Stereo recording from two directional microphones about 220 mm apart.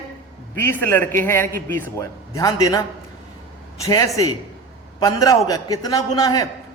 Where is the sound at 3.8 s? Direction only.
15° left (ahead or behind).